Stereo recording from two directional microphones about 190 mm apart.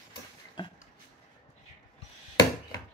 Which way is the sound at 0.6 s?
25° left (ahead or behind).